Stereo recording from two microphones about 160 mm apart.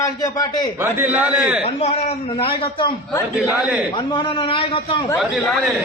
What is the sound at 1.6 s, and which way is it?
A man's voice, 40° left (ahead or behind).